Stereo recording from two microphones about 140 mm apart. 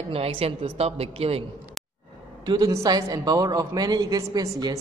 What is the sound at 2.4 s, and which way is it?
A man's voice, 30° right (ahead or behind).